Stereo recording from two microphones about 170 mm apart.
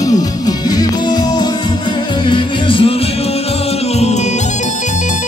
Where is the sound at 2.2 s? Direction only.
30° left (ahead or behind).